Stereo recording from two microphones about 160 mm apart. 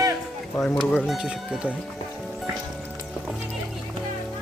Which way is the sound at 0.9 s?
10° left (ahead or behind).